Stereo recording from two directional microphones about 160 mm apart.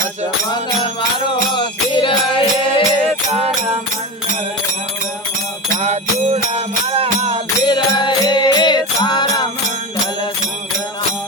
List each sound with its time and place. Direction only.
1.5 s music: 30° left (ahead or behind)
5.8 s music: 45° right (ahead or behind)
7.6 s music: 30° left (ahead or behind)